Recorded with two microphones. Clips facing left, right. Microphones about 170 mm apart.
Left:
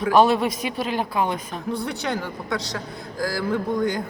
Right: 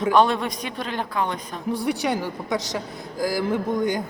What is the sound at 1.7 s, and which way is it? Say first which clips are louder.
A man's voice: right 3 dB; 15° right (ahead or behind).